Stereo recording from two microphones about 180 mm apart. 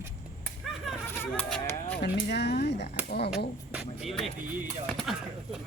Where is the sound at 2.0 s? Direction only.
65° left (ahead or behind).